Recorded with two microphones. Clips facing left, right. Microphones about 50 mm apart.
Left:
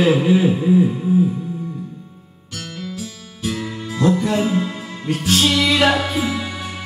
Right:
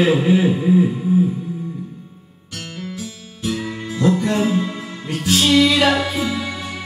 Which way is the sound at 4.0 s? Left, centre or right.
Right.